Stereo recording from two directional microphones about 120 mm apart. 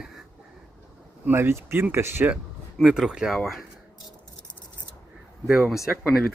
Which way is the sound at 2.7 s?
5° right (ahead or behind).